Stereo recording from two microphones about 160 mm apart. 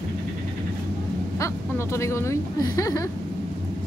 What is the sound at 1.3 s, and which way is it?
Speech, 15° left (ahead or behind).